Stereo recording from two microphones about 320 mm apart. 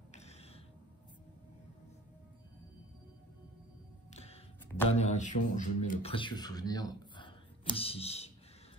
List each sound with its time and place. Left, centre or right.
0.1 s music: centre
4.1 s music: centre
4.8 s speech: left